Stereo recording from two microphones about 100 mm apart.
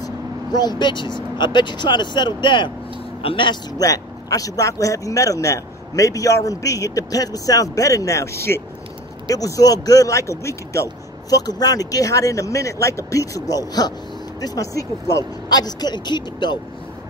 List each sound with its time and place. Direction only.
0.0 s speech: 40° left (ahead or behind)
3.2 s speech: 60° left (ahead or behind)
3.7 s speech: 40° left (ahead or behind)
9.3 s speech: 35° left (ahead or behind)